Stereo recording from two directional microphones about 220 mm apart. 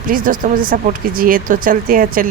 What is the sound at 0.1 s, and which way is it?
Speech, 40° right (ahead or behind).